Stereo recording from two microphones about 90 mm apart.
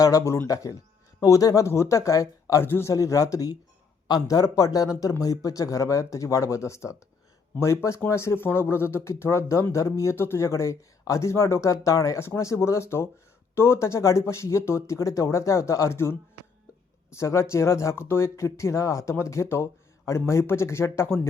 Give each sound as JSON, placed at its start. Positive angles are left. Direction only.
{"t": 0.0, "sound": "speech", "side_deg": 40}
{"t": 2.6, "sound": "speech", "side_deg": 25}
{"t": 2.9, "sound": "speech", "side_deg": 35}